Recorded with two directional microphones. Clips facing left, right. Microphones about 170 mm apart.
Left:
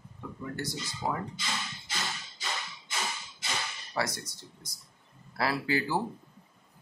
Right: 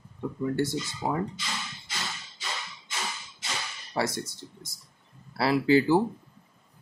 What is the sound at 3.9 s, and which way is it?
Speech, 25° right (ahead or behind).